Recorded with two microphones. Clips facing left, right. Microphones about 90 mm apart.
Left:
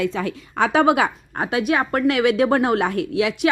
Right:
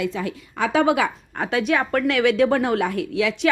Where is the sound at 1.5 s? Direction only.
10° left (ahead or behind).